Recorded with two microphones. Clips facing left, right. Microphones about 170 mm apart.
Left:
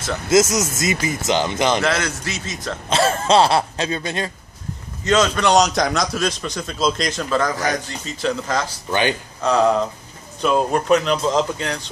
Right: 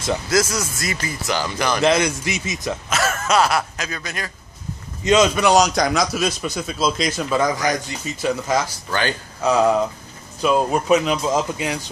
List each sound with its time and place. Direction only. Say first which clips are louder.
0.3 s speech: left 7 dB; 20° left (ahead or behind)
1.8 s a man's voice: right 4 dB; 15° right (ahead or behind)
2.9 s speech: left 5 dB; 30° left (ahead or behind)
5.0 s a man's voice: right 2 dB; 15° right (ahead or behind)